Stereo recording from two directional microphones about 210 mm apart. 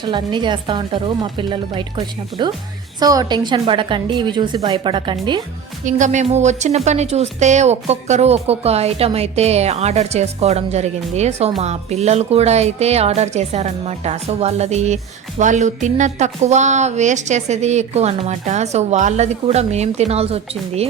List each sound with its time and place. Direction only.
0.0 s a woman's voice: 20° right (ahead or behind)
5.8 s a woman's voice: 35° right (ahead or behind)